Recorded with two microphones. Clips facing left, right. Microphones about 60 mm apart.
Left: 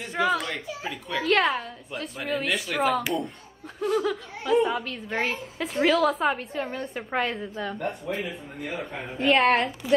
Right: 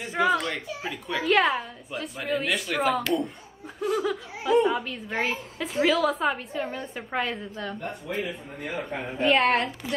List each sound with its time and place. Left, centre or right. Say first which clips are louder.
0.0 s a child's voice: right 1 dB; centre